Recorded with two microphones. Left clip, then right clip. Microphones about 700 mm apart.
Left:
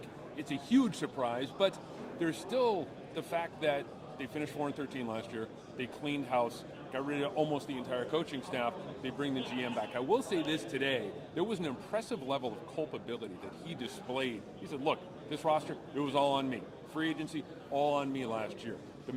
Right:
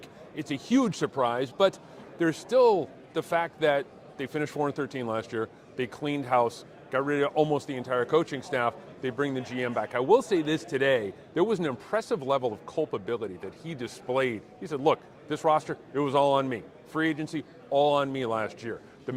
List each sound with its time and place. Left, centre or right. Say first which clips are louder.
0.3 s speech: right 5 dB; right